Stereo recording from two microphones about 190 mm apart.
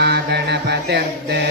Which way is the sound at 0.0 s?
60° right (ahead or behind).